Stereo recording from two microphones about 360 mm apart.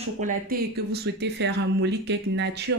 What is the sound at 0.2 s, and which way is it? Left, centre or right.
Speech, right.